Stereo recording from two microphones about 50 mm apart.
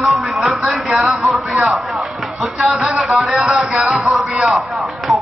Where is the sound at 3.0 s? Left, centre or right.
Centre.